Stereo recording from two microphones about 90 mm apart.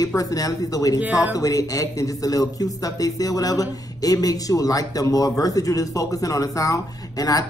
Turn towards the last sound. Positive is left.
turn(degrees=40)  # may be behind; listen again after turning